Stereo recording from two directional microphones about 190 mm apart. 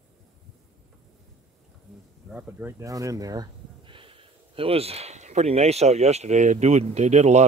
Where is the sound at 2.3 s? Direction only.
15° right (ahead or behind).